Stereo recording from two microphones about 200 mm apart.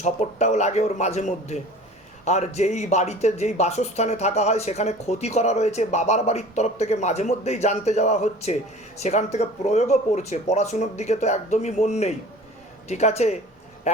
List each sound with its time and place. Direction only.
0.0 s speech: 35° left (ahead or behind)